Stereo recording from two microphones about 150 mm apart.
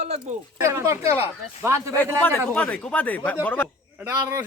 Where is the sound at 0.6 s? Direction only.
20° right (ahead or behind).